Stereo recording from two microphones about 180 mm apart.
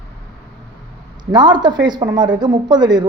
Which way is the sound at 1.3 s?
25° right (ahead or behind).